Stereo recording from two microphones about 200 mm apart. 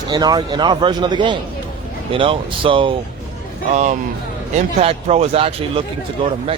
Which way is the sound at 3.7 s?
35° right (ahead or behind).